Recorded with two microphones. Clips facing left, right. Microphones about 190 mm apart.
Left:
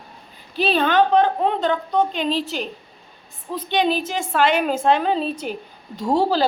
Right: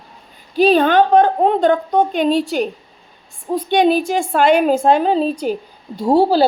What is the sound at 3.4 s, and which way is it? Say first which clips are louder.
A woman's voice: right 7 dB; 45° right (ahead or behind).